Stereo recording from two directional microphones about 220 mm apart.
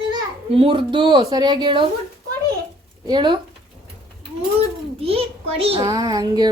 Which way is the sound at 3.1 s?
20° right (ahead or behind).